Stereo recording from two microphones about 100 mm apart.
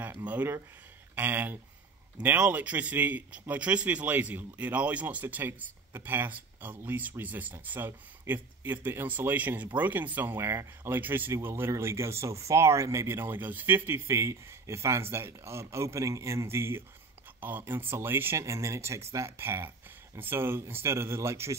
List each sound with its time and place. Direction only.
0.0 s a man's voice: 15° right (ahead or behind)